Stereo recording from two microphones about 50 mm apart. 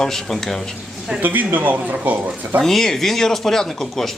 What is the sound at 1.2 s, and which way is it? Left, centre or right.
A man's voice, right.